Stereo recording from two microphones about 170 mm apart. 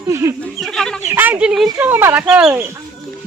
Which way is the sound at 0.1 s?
20° right (ahead or behind).